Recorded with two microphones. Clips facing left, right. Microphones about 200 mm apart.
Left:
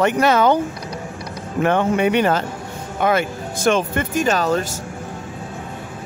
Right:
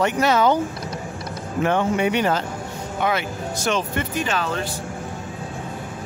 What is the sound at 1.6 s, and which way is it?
Speech, 55° left (ahead or behind).